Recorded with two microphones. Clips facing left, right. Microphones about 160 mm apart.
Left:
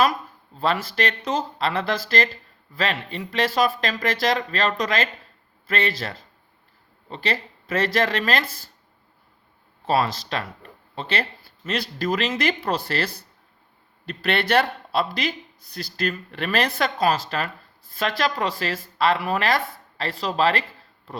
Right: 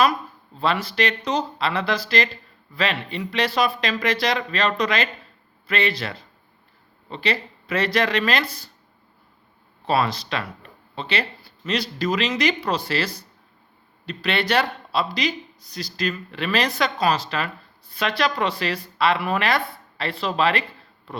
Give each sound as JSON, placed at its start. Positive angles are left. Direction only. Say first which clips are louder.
{"t": 0.6, "sound": "speech", "louder": "right 1 dB", "side_deg": 45}
{"t": 9.8, "sound": "speech", "louder": "even", "side_deg": 45}